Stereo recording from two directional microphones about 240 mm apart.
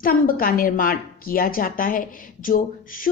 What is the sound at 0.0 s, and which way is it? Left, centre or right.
A woman's voice, left.